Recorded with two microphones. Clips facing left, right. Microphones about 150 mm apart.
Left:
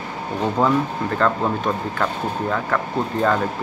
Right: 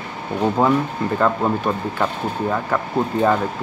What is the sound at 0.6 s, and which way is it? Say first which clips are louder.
Speech: right 1 dB; 5° right (ahead or behind).